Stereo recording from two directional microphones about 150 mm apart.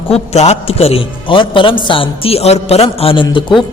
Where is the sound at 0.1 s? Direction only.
45° left (ahead or behind).